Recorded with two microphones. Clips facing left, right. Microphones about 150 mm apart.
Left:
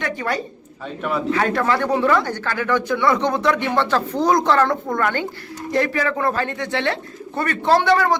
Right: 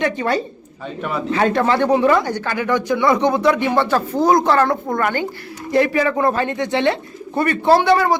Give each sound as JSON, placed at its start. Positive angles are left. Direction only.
{"t": 0.0, "sound": "a woman's voice", "side_deg": -25}